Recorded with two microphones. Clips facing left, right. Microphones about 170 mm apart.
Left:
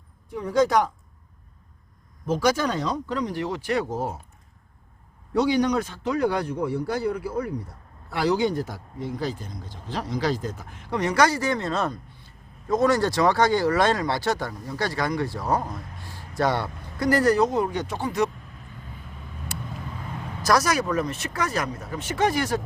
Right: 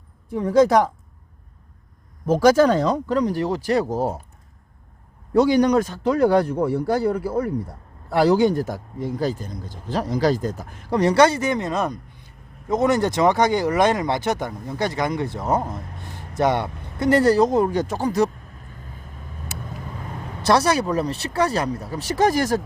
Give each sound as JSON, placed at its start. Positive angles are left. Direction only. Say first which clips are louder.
{"t": 2.2, "sound": "speech", "louder": "right 8 dB", "side_deg": -50}
{"t": 5.3, "sound": "speech", "louder": "right 5 dB", "side_deg": -45}
{"t": 20.4, "sound": "speech", "louder": "right 4 dB", "side_deg": -30}